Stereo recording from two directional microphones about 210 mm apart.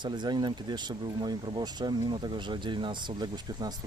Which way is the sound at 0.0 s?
20° right (ahead or behind).